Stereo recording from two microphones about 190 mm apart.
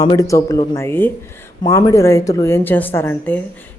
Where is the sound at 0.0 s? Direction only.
20° left (ahead or behind).